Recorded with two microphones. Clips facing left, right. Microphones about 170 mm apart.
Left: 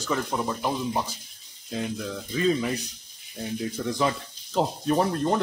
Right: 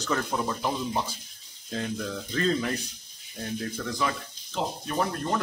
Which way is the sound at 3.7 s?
25° left (ahead or behind).